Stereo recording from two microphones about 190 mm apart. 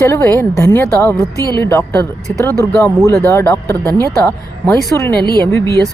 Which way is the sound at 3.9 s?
15° right (ahead or behind).